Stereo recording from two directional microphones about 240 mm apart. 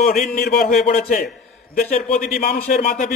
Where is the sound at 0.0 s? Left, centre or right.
Left.